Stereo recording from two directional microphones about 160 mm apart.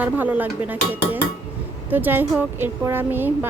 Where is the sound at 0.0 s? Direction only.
10° right (ahead or behind).